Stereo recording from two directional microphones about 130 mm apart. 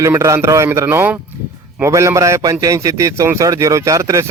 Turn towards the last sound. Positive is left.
turn(degrees=-25)  # may be behind; listen again after turning